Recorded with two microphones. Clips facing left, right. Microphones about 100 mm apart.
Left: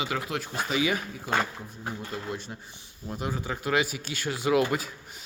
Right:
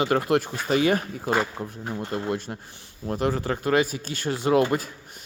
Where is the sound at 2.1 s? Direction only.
55° right (ahead or behind).